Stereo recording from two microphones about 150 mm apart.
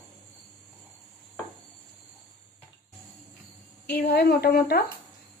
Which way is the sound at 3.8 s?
90° left.